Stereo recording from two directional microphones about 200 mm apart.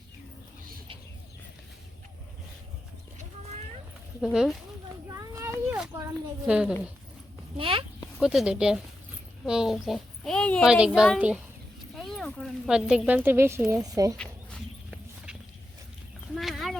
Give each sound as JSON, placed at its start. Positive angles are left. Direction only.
{"t": 4.2, "sound": "speech", "side_deg": -5}
{"t": 5.0, "sound": "a sound", "side_deg": -15}
{"t": 6.4, "sound": "speech", "side_deg": -5}
{"t": 7.5, "sound": "speech", "side_deg": -25}
{"t": 8.2, "sound": "speech", "side_deg": -5}
{"t": 14.2, "sound": "horse", "side_deg": 0}
{"t": 16.3, "sound": "a sound", "side_deg": 0}